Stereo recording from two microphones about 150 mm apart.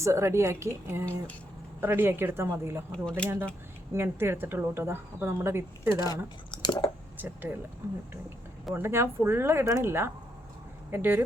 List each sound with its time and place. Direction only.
0.0 s speech: 20° right (ahead or behind)
2.9 s speech: 5° left (ahead or behind)
3.9 s speech: 15° right (ahead or behind)
6.5 s chewing: 30° left (ahead or behind)
7.8 s speech: 15° right (ahead or behind)